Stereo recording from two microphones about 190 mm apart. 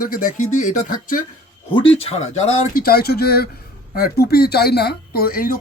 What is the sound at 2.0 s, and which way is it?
Speech, 35° left (ahead or behind).